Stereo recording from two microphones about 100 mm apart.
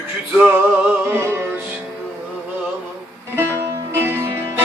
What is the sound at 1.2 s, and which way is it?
Music, 25° right (ahead or behind).